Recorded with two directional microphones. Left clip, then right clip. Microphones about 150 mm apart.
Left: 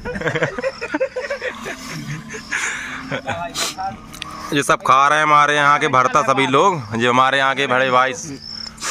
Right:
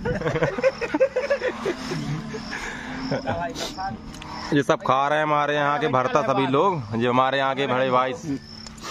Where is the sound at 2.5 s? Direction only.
10° right (ahead or behind).